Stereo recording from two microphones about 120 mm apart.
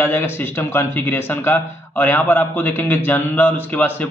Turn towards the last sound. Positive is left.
turn(degrees=15)  # may be behind; listen again after turning